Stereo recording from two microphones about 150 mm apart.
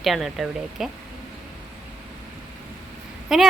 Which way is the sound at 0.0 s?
Centre (ahead or behind).